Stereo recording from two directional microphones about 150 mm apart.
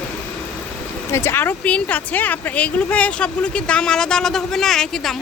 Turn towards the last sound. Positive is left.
turn(degrees=5)  # may be behind; listen again after turning